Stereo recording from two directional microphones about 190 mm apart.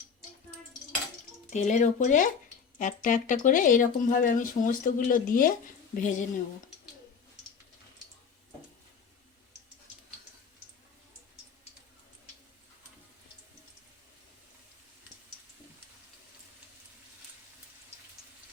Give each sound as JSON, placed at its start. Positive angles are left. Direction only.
{"t": 1.5, "sound": "speech", "side_deg": 40}